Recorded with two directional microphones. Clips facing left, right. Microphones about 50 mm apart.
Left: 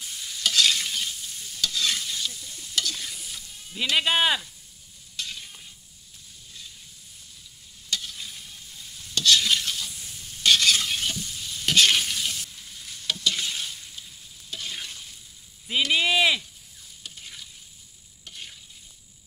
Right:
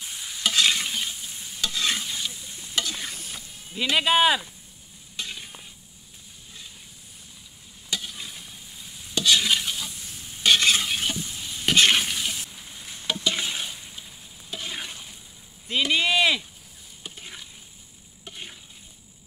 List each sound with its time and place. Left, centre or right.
0.0 s stir: right
3.3 s music: right
3.9 s speech: centre
5.1 s stir: right
7.9 s stir: centre
15.9 s speech: centre
17.0 s stir: right